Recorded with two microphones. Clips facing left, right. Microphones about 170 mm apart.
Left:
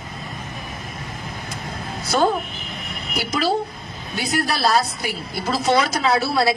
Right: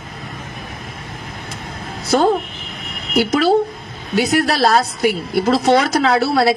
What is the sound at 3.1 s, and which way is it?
A woman's voice, 55° right (ahead or behind).